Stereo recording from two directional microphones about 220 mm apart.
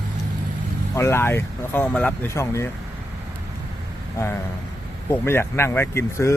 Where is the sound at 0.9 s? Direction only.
10° left (ahead or behind).